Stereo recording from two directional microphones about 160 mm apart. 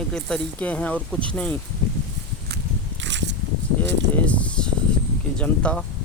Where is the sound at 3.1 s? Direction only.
90° right.